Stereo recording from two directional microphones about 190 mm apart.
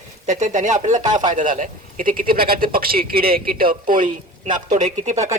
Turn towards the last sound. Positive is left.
turn(degrees=-40)  # may be behind; listen again after turning